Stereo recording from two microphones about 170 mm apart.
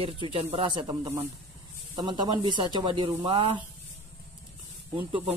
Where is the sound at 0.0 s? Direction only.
35° right (ahead or behind).